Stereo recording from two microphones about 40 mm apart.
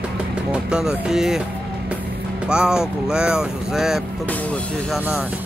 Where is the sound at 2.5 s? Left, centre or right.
Centre.